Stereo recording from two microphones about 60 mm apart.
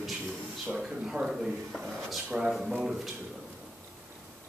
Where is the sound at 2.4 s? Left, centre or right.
Centre.